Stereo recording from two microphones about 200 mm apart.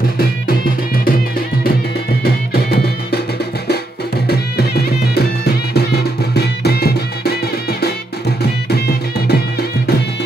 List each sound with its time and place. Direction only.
2.2 s music: 50° left (ahead or behind)
4.3 s music: 50° left (ahead or behind)
8.4 s music: 55° left (ahead or behind)